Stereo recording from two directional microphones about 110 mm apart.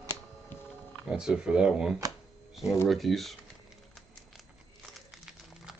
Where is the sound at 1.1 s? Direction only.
5° right (ahead or behind).